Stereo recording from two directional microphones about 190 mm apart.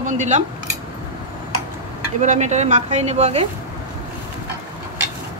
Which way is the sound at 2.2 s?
40° right (ahead or behind).